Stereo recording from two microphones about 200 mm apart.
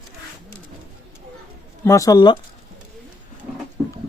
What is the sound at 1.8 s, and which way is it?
Speech, 15° left (ahead or behind).